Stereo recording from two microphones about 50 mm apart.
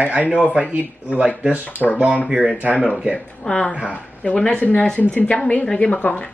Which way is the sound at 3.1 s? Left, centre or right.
Left.